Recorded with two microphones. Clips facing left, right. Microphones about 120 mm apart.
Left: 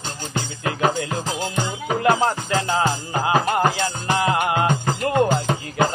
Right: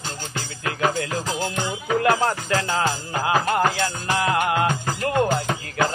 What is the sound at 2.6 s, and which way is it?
Music, 15° left (ahead or behind).